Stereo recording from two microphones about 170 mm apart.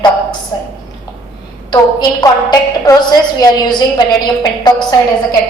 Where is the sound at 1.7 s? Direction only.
25° left (ahead or behind).